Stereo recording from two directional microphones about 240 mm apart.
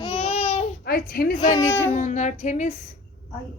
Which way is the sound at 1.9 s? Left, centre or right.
Left.